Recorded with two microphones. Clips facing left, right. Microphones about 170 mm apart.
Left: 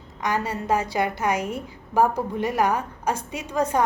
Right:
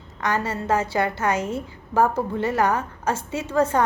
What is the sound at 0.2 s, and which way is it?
A woman's voice, 15° left (ahead or behind).